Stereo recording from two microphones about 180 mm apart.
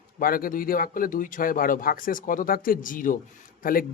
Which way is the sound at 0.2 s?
55° left (ahead or behind).